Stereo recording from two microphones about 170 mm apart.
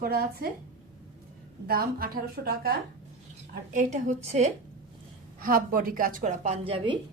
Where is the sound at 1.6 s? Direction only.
60° right (ahead or behind).